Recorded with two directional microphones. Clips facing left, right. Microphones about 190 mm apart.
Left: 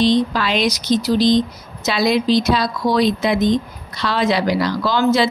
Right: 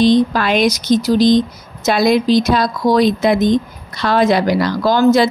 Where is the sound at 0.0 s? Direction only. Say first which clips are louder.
Right 4 dB; 50° right (ahead or behind).